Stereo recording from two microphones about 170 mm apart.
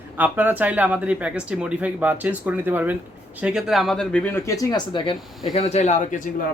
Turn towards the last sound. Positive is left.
turn(degrees=50)  # may be behind; listen again after turning